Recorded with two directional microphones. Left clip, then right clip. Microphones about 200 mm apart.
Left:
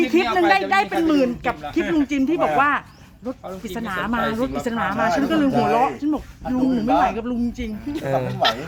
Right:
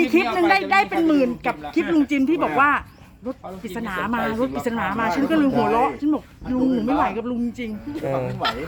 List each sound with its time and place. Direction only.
0.0 s a woman's voice: 10° right (ahead or behind)
3.8 s speech: 5° left (ahead or behind)
8.3 s speech: 30° left (ahead or behind)